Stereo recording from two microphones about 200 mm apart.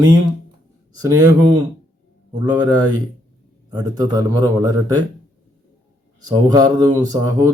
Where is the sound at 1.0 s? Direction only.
15° right (ahead or behind).